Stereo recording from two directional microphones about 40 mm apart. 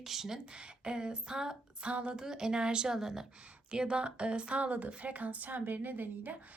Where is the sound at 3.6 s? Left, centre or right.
Right.